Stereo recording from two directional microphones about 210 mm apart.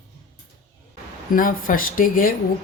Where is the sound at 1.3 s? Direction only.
40° left (ahead or behind).